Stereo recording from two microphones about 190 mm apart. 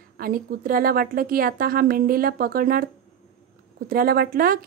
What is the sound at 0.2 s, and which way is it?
A woman's voice, 50° right (ahead or behind).